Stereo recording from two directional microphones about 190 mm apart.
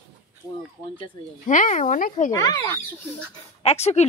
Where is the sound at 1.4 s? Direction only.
40° left (ahead or behind).